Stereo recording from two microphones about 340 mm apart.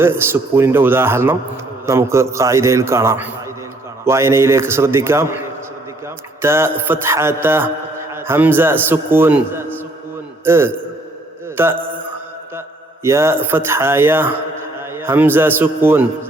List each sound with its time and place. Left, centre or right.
0.0 s a man's voice: centre